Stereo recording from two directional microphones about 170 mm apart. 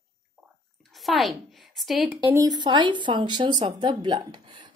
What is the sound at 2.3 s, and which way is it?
Speech, 20° right (ahead or behind).